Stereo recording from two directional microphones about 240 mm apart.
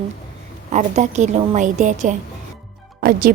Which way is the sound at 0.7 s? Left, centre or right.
Right.